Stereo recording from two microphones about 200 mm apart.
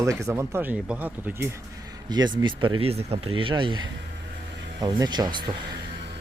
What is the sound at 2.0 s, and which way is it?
Speech, 20° right (ahead or behind).